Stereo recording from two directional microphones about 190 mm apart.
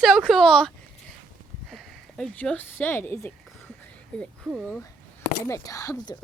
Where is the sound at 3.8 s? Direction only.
5° left (ahead or behind).